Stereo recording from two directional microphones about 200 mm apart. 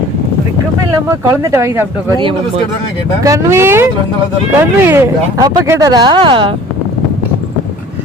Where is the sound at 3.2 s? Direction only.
15° right (ahead or behind).